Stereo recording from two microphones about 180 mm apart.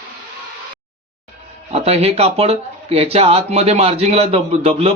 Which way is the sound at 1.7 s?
35° right (ahead or behind).